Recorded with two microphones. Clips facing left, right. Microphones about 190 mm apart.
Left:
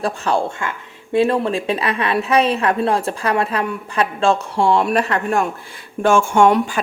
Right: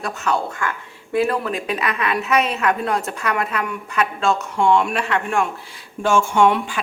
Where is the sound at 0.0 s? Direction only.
30° left (ahead or behind).